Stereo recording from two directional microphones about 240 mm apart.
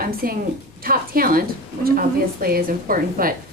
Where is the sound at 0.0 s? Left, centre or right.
Right.